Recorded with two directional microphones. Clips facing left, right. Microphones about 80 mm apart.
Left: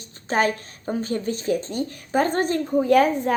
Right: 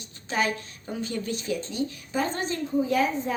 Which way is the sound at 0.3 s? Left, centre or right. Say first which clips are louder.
Left 5 dB; left.